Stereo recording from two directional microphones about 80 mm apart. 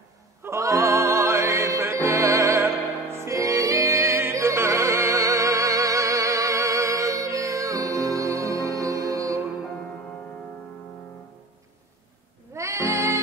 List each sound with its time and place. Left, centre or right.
0.4 s music: right
12.5 s music: right